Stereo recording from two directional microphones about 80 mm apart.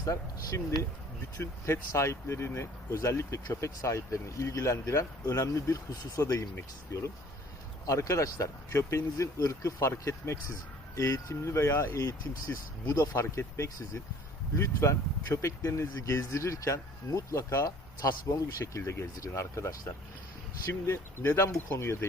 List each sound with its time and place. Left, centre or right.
0.0 s speech: left
1.4 s speech: left
11.9 s speech: left
13.1 s speech: left
18.6 s speech: left
20.8 s speech: left